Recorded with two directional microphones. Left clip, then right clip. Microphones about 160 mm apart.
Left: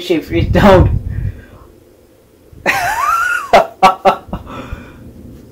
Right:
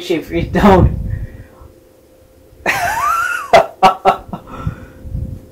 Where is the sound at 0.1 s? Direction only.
5° left (ahead or behind).